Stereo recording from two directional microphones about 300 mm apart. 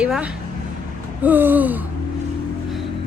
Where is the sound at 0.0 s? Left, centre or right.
Centre.